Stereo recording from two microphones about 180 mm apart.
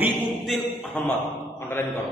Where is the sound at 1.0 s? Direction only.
5° left (ahead or behind).